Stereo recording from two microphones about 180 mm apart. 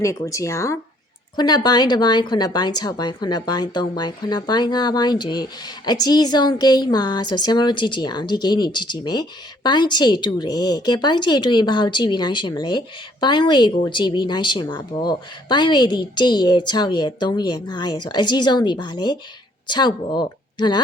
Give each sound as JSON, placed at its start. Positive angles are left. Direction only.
{"t": 0.0, "sound": "speech", "side_deg": 15}